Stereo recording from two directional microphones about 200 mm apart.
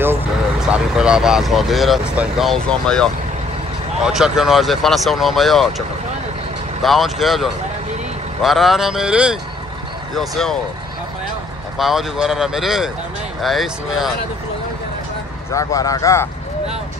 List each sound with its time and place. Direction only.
0.0 s speech: 5° right (ahead or behind)
11.8 s speech: centre (ahead or behind)
15.5 s speech: 15° left (ahead or behind)